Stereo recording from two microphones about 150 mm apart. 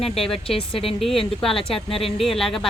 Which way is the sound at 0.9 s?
Centre (ahead or behind).